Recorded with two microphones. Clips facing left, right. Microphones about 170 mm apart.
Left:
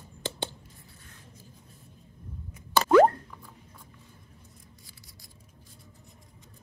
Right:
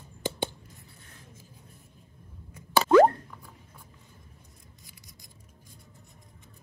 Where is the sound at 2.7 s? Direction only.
10° right (ahead or behind).